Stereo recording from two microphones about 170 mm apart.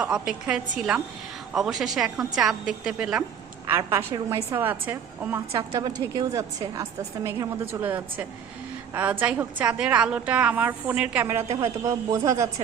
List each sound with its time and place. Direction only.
0.0 s a woman's voice: 5° right (ahead or behind)